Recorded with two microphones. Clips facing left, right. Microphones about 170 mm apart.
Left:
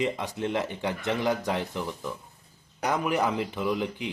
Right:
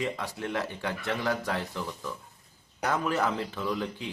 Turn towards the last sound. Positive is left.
turn(degrees=15)  # may be behind; listen again after turning